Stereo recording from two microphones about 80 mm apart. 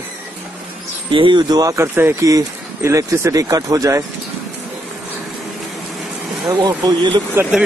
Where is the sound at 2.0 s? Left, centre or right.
Right.